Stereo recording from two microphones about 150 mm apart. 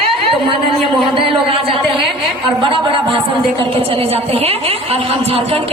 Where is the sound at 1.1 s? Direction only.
40° right (ahead or behind).